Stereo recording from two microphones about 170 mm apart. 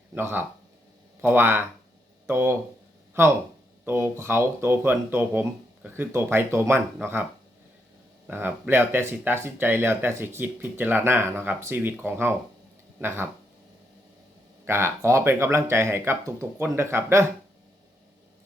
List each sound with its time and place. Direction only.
0.1 s speech: 10° right (ahead or behind)
8.3 s speech: 10° right (ahead or behind)
14.6 s speech: 15° right (ahead or behind)